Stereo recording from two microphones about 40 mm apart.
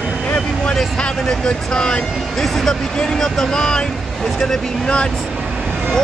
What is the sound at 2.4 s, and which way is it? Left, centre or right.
Speech, centre.